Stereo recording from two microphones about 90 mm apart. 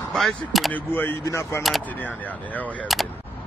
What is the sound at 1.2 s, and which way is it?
Speech, 30° left (ahead or behind).